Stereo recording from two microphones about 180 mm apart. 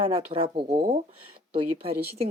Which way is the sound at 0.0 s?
30° right (ahead or behind).